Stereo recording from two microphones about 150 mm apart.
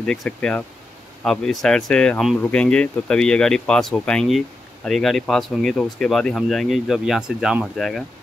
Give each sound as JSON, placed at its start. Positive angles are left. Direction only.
{"t": 0.0, "sound": "speech", "side_deg": 5}